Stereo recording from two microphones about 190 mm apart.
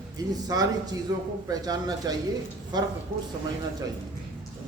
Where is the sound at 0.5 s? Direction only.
20° right (ahead or behind).